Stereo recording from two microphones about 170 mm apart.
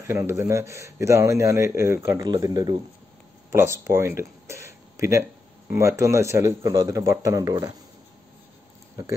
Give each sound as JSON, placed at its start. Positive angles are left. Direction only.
{"t": 0.0, "sound": "speech", "side_deg": -15}